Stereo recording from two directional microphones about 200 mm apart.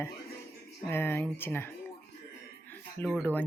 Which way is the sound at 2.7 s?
10° left (ahead or behind).